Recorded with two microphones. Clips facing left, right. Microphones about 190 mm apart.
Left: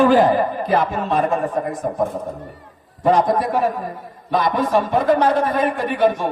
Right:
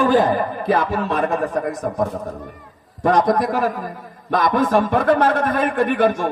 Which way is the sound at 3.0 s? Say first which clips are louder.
Even; 70° right (ahead or behind).